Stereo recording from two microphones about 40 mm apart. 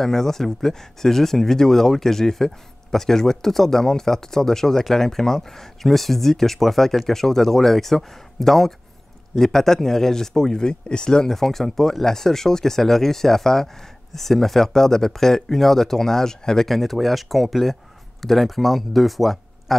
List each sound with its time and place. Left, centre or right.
0.0 s speech: centre
11.3 s speech: centre
16.7 s speech: centre